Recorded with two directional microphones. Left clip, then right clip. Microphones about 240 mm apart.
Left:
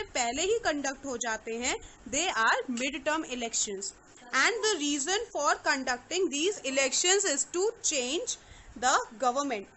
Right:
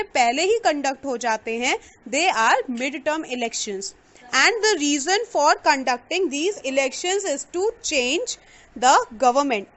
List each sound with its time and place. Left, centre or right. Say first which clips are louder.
0.0 s a woman's voice: right 11 dB; right